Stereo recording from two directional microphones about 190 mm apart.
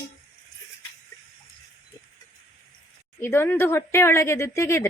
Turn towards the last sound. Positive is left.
turn(degrees=15)  # may be behind; listen again after turning